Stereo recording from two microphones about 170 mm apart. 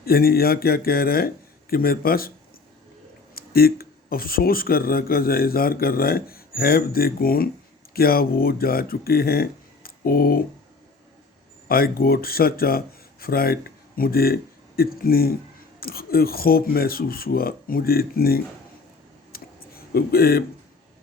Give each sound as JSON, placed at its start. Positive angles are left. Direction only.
{"t": 0.0, "sound": "speech", "side_deg": 60}
{"t": 3.3, "sound": "speech", "side_deg": 60}
{"t": 11.7, "sound": "speech", "side_deg": 60}
{"t": 19.3, "sound": "a sound", "side_deg": 60}